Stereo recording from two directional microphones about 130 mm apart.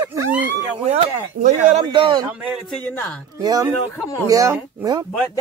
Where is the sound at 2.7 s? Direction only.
10° left (ahead or behind).